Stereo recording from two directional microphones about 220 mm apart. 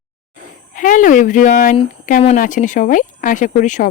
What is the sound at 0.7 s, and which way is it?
Speech, 35° left (ahead or behind).